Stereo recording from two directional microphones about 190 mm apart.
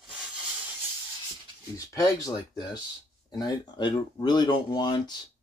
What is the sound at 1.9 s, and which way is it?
Speech, 20° left (ahead or behind).